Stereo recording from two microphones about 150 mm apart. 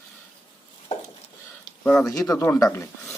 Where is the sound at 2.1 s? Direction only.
20° left (ahead or behind).